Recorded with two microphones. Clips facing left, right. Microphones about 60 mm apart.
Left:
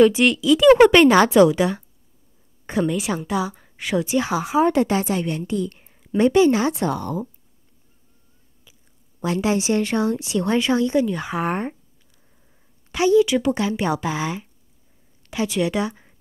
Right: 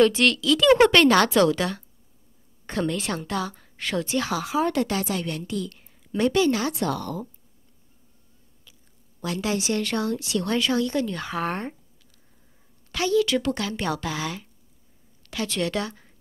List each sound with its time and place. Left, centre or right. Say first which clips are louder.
0.0 s a woman's voice: left 4 dB; centre
9.2 s a woman's voice: left 6 dB; left
12.9 s a woman's voice: left 6 dB; centre